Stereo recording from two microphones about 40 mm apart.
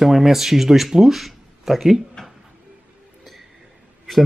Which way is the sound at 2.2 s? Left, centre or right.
Centre.